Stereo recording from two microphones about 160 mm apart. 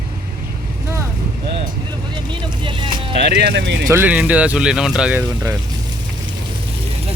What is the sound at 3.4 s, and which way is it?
Speech, 90° right.